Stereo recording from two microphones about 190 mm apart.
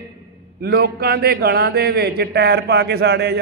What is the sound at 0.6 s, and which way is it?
A man's voice, 55° right (ahead or behind).